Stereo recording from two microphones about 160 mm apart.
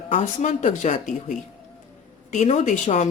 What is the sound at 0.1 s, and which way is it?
Speech, 50° left (ahead or behind).